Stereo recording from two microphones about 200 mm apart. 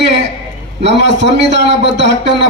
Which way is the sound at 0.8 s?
60° right (ahead or behind).